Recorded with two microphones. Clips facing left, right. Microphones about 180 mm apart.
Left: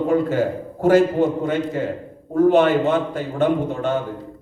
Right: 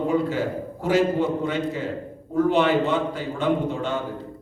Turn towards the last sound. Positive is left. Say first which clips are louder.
# left 4 dB
turn(degrees=50)  # may be behind; listen again after turning